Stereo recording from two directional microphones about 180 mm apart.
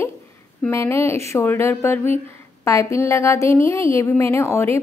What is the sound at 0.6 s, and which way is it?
A woman's voice, 10° left (ahead or behind).